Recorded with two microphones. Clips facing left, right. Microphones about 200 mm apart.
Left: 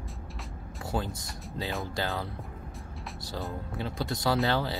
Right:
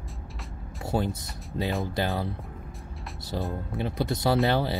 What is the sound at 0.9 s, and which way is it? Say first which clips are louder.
Speech: right 5 dB; 20° right (ahead or behind).